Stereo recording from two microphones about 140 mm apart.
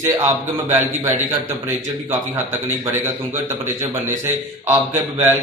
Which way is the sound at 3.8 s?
15° right (ahead or behind).